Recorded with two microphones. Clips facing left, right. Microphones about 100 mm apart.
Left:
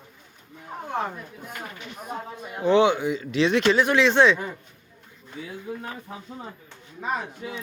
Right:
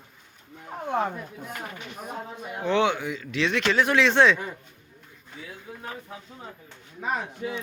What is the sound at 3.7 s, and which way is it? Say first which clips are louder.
Speech: left 2 dB; 5° left (ahead or behind).